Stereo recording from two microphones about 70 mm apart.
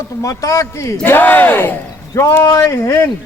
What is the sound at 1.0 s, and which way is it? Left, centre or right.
Speech, left.